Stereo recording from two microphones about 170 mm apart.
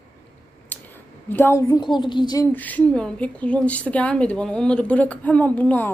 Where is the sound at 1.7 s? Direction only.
25° left (ahead or behind).